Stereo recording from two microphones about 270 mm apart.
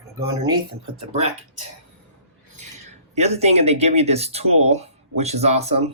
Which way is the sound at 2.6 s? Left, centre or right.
Right.